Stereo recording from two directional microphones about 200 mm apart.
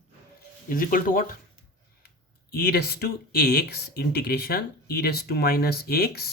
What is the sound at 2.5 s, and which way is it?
Speech, 50° left (ahead or behind).